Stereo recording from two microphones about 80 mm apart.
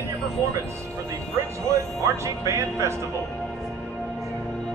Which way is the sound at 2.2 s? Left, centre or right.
Right.